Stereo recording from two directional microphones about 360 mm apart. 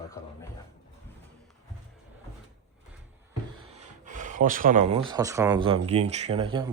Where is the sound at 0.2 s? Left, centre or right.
Centre.